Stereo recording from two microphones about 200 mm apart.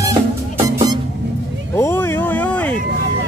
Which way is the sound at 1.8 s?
10° left (ahead or behind).